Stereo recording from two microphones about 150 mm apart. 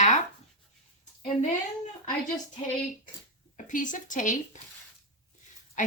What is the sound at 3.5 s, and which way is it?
Speech, 55° left (ahead or behind).